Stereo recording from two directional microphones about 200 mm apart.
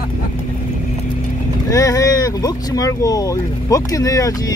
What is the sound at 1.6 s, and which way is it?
Speech, 15° left (ahead or behind).